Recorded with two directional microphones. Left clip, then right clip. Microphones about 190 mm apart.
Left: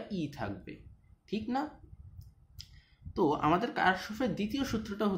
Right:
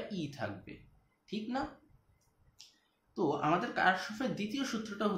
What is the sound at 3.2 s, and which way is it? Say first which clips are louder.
Speech: left 3 dB; 30° left (ahead or behind).